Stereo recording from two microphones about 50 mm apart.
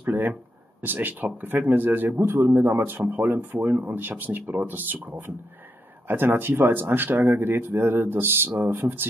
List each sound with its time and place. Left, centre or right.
0.0 s speech: right